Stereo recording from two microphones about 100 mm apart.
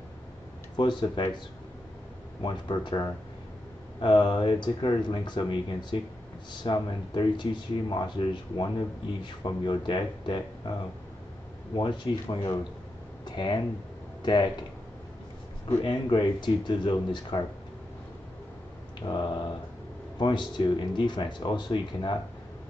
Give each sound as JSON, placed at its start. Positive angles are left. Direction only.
{"t": 0.7, "sound": "speech", "side_deg": 55}
{"t": 2.4, "sound": "speech", "side_deg": 50}
{"t": 11.7, "sound": "speech", "side_deg": 50}
{"t": 15.8, "sound": "speech", "side_deg": 50}
{"t": 19.0, "sound": "speech", "side_deg": 50}